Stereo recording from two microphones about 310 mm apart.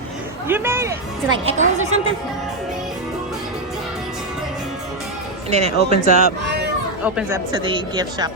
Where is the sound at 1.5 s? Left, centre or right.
Right.